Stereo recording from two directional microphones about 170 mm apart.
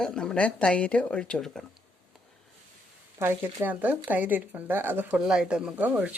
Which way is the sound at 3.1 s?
15° right (ahead or behind).